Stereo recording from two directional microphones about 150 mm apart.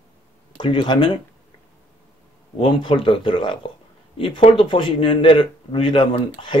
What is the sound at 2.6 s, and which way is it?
A man's voice, 35° left (ahead or behind).